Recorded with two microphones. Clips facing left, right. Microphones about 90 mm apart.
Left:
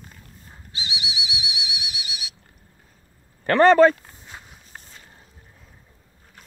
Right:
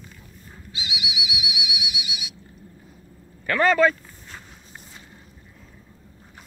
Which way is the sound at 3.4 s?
40° left (ahead or behind).